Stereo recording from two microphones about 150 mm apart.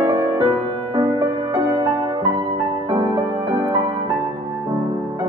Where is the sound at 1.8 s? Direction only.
30° right (ahead or behind).